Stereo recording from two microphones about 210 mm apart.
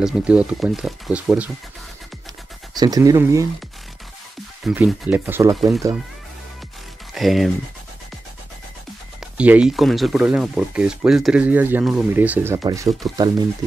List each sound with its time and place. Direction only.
0.0 s speech: 5° right (ahead or behind)
2.7 s speech: 20° right (ahead or behind)
4.6 s speech: 5° right (ahead or behind)
7.2 s speech: centre (ahead or behind)
9.2 s speech: 5° right (ahead or behind)